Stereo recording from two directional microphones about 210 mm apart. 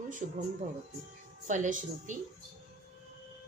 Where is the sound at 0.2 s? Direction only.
40° right (ahead or behind).